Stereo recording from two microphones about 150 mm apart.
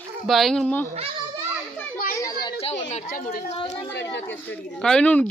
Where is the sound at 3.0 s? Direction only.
70° left (ahead or behind).